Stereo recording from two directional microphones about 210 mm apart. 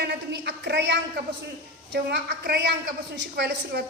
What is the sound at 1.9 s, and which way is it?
A woman's voice, 50° right (ahead or behind).